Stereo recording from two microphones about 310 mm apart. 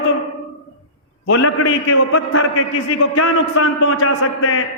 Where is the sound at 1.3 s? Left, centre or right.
Left.